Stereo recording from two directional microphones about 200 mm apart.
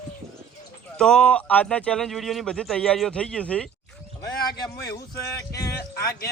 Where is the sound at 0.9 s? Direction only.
5° left (ahead or behind).